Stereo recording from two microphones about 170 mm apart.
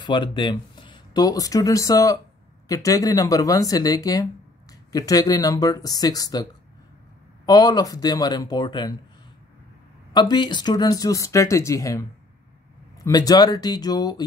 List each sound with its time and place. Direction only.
0.0 s speech: 30° left (ahead or behind)
7.4 s speech: 20° left (ahead or behind)
10.1 s speech: 25° left (ahead or behind)